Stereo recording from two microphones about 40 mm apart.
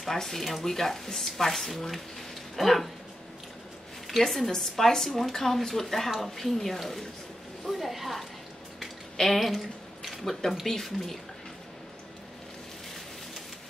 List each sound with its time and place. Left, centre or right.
0.0 s speech: centre
4.3 s speech: centre
9.1 s a sound: centre
10.7 s speech: centre